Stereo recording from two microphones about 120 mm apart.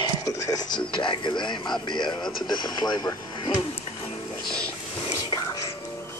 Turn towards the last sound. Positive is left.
turn(degrees=30)  # may be behind; listen again after turning